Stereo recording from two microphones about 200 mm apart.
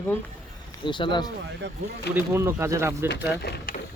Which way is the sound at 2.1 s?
10° right (ahead or behind).